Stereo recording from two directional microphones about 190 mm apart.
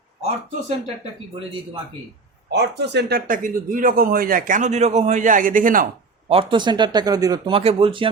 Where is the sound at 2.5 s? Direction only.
65° right (ahead or behind); by 6.3 s 45° right (ahead or behind).